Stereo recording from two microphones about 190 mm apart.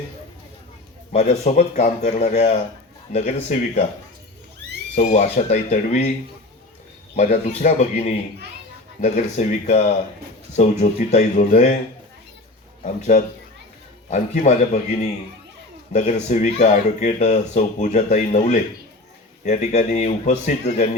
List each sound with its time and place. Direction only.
1.1 s speech: 35° left (ahead or behind)
4.9 s speech: 40° left (ahead or behind)
7.2 s speech: 35° left (ahead or behind)
12.8 s speech: 40° left (ahead or behind)
15.9 s speech: 40° left (ahead or behind)